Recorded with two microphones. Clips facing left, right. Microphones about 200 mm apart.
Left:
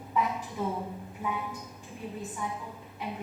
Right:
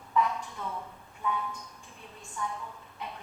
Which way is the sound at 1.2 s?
10° left (ahead or behind).